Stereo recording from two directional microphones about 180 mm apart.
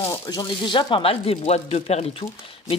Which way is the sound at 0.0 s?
20° left (ahead or behind).